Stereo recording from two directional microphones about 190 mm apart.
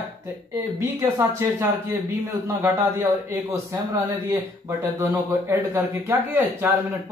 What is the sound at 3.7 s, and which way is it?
Speech, 15° right (ahead or behind).